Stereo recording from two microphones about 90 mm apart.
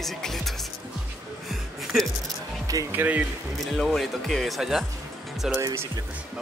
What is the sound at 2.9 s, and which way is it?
Speech, 20° right (ahead or behind).